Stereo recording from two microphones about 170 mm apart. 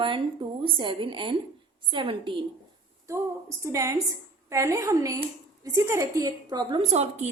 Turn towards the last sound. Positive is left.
turn(degrees=-40)  # may be behind; listen again after turning